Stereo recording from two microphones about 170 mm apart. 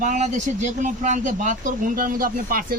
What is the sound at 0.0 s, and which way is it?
Speech, 45° right (ahead or behind).